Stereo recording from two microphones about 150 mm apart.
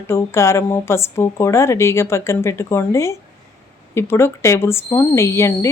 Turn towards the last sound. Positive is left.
turn(degrees=20)  # may be behind; listen again after turning